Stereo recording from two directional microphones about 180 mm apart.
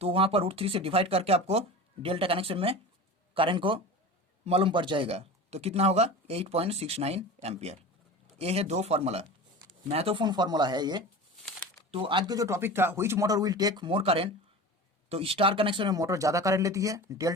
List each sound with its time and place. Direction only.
0.0 s speech: 30° right (ahead or behind)